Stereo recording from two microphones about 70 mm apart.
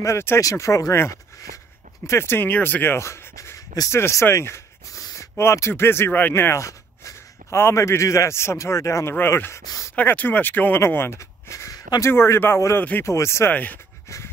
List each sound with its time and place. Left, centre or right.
0.0 s speech: left
0.4 s speech: left
6.5 s a sound: left
7.6 s speech: left
10.1 s speech: left
13.5 s speech: left